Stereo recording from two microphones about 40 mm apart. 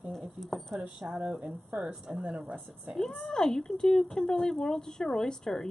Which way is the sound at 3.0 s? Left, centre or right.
Centre.